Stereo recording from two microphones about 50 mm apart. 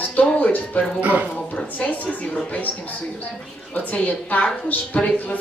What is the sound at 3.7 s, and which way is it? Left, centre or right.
A woman's voice, left.